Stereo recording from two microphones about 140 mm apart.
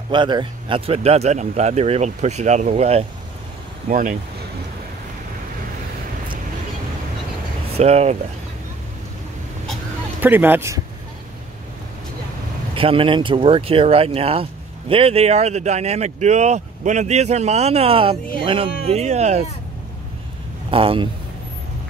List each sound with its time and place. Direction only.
0.1 s speech: 35° right (ahead or behind)
7.7 s speech: 50° right (ahead or behind)
10.2 s speech: 15° right (ahead or behind)
12.7 s a man's voice: 40° right (ahead or behind)
18.9 s speech: 50° right (ahead or behind)
20.7 s a man's voice: 40° right (ahead or behind)